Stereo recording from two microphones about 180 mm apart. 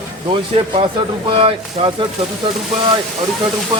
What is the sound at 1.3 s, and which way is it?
Speech, 30° right (ahead or behind).